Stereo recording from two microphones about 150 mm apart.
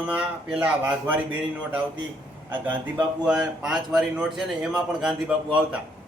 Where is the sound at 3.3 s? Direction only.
5° right (ahead or behind).